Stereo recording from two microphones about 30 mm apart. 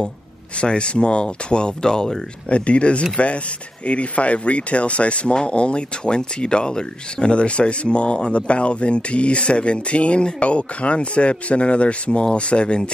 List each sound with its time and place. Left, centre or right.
0.6 s speech: left
2.5 s speech: left